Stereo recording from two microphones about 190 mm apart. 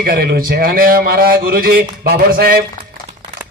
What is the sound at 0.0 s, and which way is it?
Speech, 55° right (ahead or behind).